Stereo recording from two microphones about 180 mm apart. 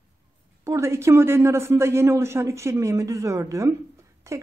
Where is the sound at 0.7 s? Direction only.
15° right (ahead or behind).